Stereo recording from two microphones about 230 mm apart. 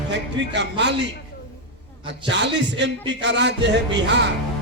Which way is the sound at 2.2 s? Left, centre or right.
Right.